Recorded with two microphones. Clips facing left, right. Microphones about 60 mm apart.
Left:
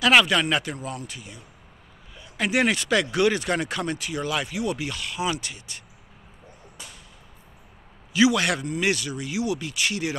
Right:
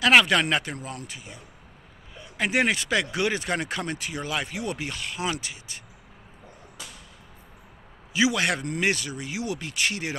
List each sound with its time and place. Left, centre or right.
0.0 s speech: right
1.0 s speech: right
5.4 s speech: right
8.1 s speech: right